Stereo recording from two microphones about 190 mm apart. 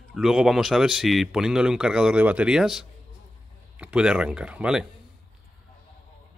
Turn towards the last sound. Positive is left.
turn(degrees=-5)  # may be behind; listen again after turning